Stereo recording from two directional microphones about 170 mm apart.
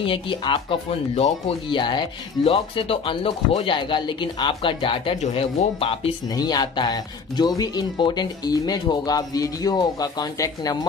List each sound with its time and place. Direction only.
0.0 s speech: 30° left (ahead or behind)
6.3 s speech: 25° left (ahead or behind)